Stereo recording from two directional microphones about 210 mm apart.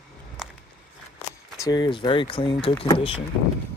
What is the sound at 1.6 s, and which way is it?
Speech, 20° left (ahead or behind).